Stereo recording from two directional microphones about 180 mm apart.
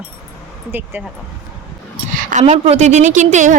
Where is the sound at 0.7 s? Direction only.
10° right (ahead or behind).